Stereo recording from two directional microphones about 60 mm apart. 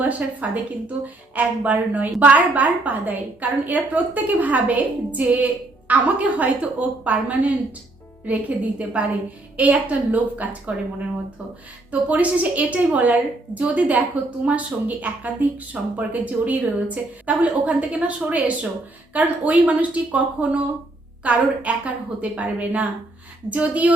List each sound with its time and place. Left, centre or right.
0.0 s a woman's voice: right
11.9 s a woman's voice: right